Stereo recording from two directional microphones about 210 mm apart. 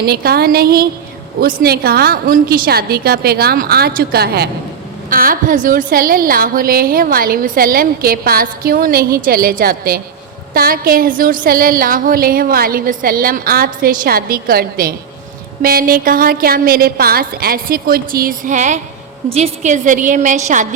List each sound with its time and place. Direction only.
0.0 s a woman's voice: 45° right (ahead or behind)